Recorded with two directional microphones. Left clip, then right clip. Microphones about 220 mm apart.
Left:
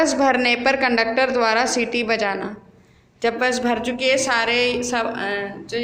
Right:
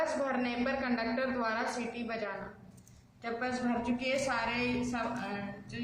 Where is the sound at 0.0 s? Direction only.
40° left (ahead or behind).